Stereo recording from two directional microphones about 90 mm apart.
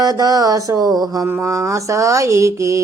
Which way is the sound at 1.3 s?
30° right (ahead or behind).